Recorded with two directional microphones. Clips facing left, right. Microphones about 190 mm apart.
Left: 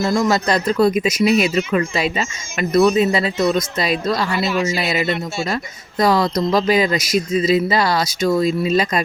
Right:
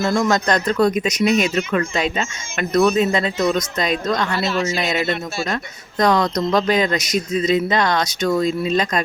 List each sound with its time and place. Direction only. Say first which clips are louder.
0.0 s speech: left 1 dB; 5° left (ahead or behind)